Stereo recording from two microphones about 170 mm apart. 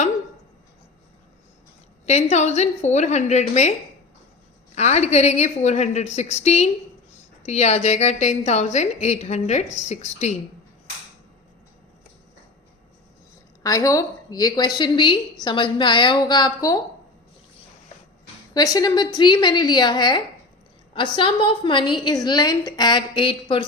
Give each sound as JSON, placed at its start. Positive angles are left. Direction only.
{"t": 2.3, "sound": "a woman's voice", "side_deg": 40}
{"t": 13.6, "sound": "a woman's voice", "side_deg": 20}
{"t": 18.5, "sound": "a woman's voice", "side_deg": 20}